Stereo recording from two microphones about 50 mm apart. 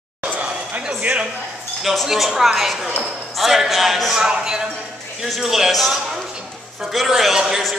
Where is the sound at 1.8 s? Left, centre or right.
Centre.